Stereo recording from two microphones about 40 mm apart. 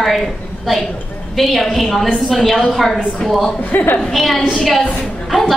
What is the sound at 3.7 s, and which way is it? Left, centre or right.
Speech, left.